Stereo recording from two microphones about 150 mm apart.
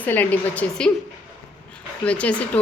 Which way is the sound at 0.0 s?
10° left (ahead or behind).